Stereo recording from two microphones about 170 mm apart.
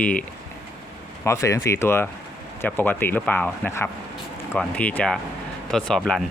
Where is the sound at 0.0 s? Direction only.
5° left (ahead or behind).